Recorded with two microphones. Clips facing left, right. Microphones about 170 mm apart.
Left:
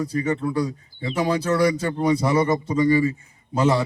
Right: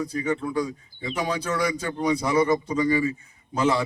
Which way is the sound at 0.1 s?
35° left (ahead or behind).